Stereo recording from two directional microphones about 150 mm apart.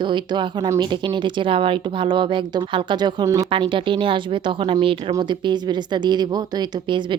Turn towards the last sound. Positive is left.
turn(degrees=-30)  # may be behind; listen again after turning